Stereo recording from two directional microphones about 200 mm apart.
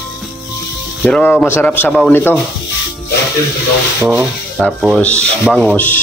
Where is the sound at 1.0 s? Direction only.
5° left (ahead or behind).